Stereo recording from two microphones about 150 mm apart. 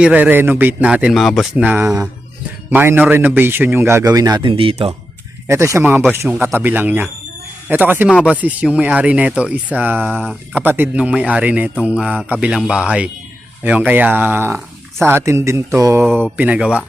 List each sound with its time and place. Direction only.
0.0 s speech: 10° right (ahead or behind)
1.6 s speech: 10° right (ahead or behind); by 4.9 s 40° right (ahead or behind)
5.5 s speech: 20° right (ahead or behind)
16.4 s speech: 10° right (ahead or behind)